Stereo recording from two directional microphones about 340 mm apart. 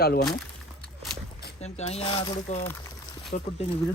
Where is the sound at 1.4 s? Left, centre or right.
Centre.